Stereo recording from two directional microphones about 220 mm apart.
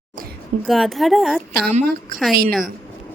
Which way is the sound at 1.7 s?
40° right (ahead or behind).